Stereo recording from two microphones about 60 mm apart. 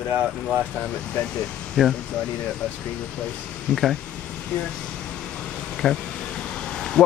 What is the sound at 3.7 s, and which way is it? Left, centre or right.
Speech, centre.